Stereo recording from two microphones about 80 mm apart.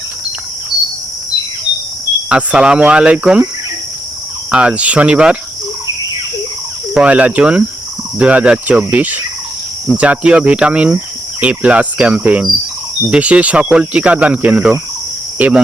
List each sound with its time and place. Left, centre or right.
2.3 s speech: centre
4.5 s speech: centre
6.9 s speech: centre
8.9 s cricket: centre
9.9 s speech: centre
15.4 s cricket: centre